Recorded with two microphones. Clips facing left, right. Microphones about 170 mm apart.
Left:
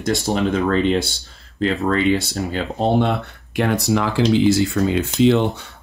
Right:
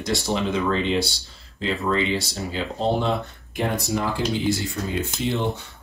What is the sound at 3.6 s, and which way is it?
Speech, 75° left (ahead or behind).